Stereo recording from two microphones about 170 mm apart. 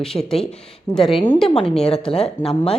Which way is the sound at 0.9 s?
30° left (ahead or behind).